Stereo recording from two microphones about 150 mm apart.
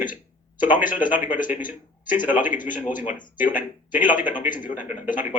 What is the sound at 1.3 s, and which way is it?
A man's voice, 60° left (ahead or behind).